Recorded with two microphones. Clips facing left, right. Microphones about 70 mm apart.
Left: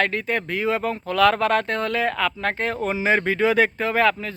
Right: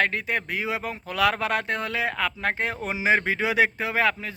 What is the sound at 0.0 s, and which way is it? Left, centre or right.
Speech, centre.